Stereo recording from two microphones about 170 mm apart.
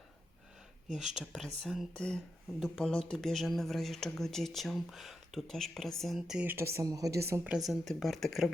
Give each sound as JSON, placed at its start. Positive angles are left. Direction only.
{"t": 0.9, "sound": "a woman's voice", "side_deg": -5}
{"t": 7.7, "sound": "speech", "side_deg": 0}